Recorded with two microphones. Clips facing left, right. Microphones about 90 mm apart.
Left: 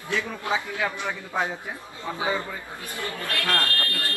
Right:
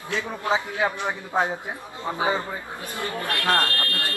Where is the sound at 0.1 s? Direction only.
20° right (ahead or behind).